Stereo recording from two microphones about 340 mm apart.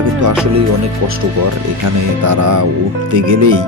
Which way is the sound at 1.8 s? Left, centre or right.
Right.